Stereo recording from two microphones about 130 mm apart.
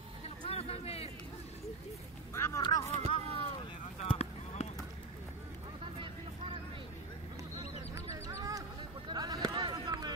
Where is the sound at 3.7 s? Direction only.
45° left (ahead or behind).